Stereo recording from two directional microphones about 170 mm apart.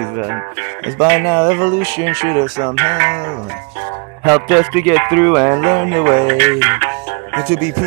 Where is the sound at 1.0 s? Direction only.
40° right (ahead or behind).